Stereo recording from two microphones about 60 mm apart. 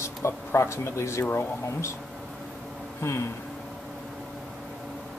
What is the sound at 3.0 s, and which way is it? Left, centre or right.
Speech, left.